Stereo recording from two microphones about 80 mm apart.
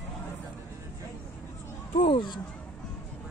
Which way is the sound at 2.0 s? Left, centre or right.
Left.